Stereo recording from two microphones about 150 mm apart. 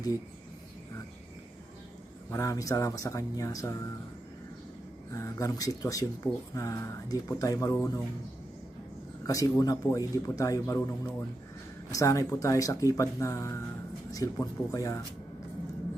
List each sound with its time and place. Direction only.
2.3 s speech: 20° left (ahead or behind)
5.1 s speech: 20° left (ahead or behind)
9.2 s speech: 25° left (ahead or behind)